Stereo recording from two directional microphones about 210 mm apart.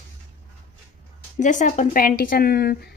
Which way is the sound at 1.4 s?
35° left (ahead or behind).